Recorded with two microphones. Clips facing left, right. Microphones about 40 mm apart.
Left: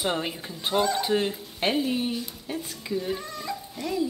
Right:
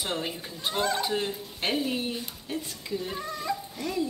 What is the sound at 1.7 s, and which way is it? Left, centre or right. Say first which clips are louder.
Speech: left 3 dB; centre.